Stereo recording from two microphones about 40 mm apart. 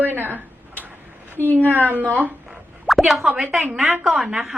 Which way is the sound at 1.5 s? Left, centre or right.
Right.